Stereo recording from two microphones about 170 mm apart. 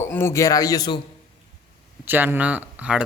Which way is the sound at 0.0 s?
15° left (ahead or behind).